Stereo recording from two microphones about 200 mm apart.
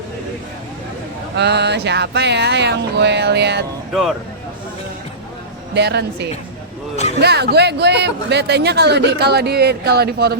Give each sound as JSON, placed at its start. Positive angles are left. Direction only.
{"t": 1.4, "sound": "speech", "side_deg": -55}
{"t": 5.7, "sound": "speech", "side_deg": -55}
{"t": 6.9, "sound": "a sound", "side_deg": 35}
{"t": 7.2, "sound": "speech", "side_deg": -55}